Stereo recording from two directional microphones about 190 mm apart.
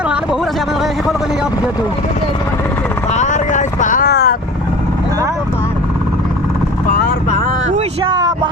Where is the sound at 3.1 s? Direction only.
40° left (ahead or behind); by 4.4 s 55° left (ahead or behind).